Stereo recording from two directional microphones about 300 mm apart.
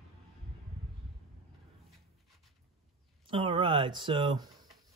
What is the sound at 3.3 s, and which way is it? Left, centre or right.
Speech, centre.